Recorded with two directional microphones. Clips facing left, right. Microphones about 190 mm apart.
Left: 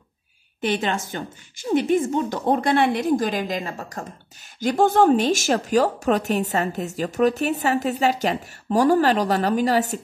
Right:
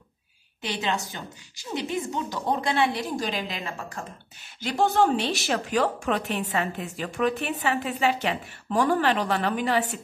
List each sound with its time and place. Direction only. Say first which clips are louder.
0.6 s a woman's voice: left 5 dB; 55° left (ahead or behind)